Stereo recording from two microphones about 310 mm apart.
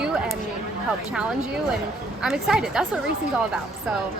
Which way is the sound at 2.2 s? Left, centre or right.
Centre.